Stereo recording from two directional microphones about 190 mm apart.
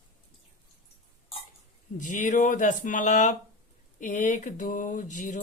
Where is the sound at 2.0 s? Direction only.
40° left (ahead or behind).